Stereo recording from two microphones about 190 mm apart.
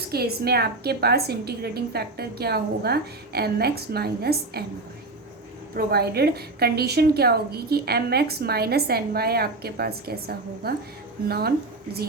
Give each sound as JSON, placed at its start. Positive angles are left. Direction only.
{"t": 0.1, "sound": "a woman's voice", "side_deg": -55}
{"t": 5.7, "sound": "a woman's voice", "side_deg": -55}